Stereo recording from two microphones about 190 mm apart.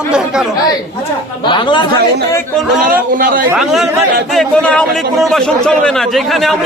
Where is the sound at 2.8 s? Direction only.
45° right (ahead or behind).